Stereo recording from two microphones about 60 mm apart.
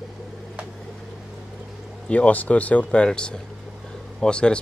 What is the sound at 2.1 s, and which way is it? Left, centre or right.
Speech, left.